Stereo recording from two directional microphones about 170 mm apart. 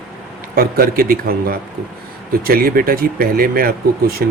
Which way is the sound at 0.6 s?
60° right (ahead or behind).